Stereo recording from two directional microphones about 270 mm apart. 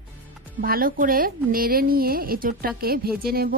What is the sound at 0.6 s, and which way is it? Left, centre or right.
Speech, right.